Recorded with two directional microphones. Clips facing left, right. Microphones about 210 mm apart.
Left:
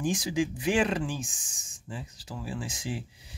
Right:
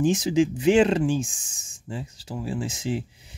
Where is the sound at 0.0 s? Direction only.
25° right (ahead or behind).